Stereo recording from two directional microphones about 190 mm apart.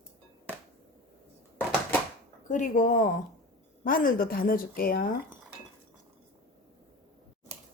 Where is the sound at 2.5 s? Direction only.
40° left (ahead or behind).